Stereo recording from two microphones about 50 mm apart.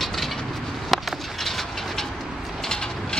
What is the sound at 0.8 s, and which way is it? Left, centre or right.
Bird, centre.